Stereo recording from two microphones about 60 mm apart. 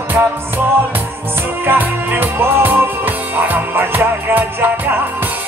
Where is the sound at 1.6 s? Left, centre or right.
Right.